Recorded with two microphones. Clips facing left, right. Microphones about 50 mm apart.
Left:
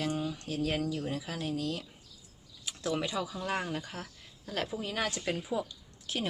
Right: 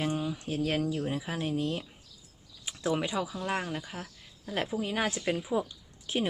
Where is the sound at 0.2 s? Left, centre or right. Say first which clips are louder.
Right 2 dB; centre.